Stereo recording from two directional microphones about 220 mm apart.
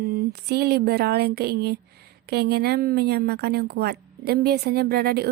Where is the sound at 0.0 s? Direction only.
45° right (ahead or behind).